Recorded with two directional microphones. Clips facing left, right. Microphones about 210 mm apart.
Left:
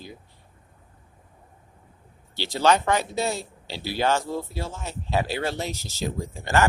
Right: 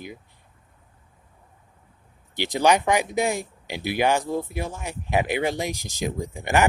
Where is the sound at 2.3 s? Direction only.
15° right (ahead or behind).